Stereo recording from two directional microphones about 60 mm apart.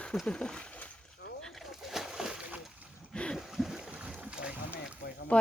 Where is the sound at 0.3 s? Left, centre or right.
Centre.